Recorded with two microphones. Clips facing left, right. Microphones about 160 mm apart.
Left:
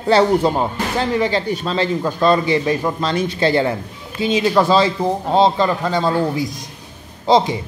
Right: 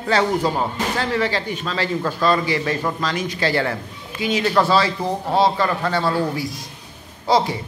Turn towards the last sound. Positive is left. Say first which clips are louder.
# left 4 dB
turn(degrees=25)  # may be behind; listen again after turning